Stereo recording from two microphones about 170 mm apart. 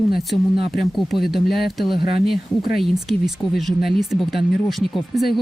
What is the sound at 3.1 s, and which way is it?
Speech, centre (ahead or behind).